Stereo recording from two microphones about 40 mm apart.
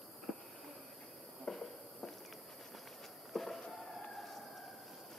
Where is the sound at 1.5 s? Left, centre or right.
Centre.